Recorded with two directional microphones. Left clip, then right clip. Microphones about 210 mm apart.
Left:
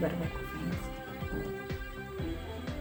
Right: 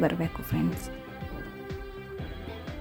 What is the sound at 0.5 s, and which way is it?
Speech, 55° right (ahead or behind).